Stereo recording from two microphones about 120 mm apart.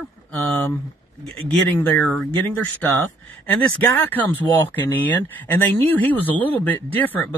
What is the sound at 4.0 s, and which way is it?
Speech, 15° left (ahead or behind).